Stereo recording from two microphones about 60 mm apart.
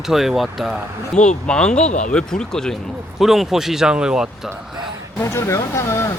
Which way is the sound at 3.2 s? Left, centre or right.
Centre.